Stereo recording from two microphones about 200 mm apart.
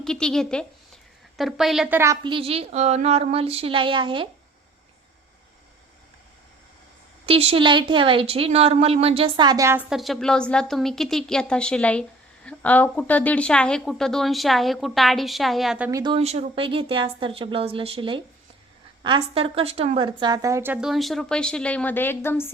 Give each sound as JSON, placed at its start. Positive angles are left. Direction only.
{"t": 0.0, "sound": "speech", "side_deg": 5}
{"t": 2.2, "sound": "a woman's voice", "side_deg": -25}
{"t": 7.3, "sound": "a woman's voice", "side_deg": -30}
{"t": 9.9, "sound": "speech", "side_deg": 0}
{"t": 15.9, "sound": "a woman's voice", "side_deg": -20}